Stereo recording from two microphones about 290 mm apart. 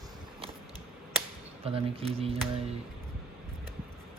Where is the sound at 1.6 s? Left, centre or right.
Centre.